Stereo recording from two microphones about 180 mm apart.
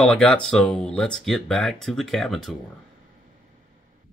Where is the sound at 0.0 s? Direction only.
5° left (ahead or behind).